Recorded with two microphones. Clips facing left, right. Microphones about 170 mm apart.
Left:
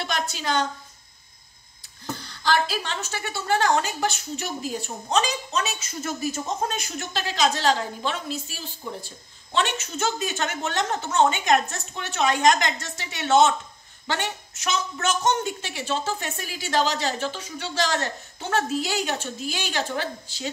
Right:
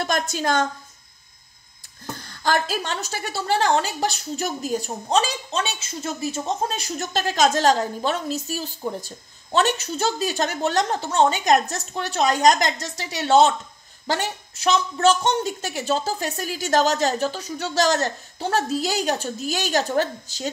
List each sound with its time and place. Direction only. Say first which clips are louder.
0.0 s a woman's voice: right 5 dB; 45° right (ahead or behind)
2.2 s a woman's voice: right 1 dB; 50° right (ahead or behind)